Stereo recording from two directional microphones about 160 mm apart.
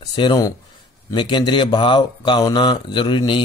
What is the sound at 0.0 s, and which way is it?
A man's voice, 25° left (ahead or behind).